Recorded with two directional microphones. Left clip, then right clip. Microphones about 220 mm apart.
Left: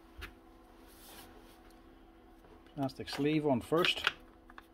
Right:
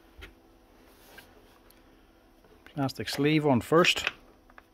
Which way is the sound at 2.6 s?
40° right (ahead or behind).